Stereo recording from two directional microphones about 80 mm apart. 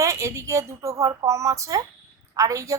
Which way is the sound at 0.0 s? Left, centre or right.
Right.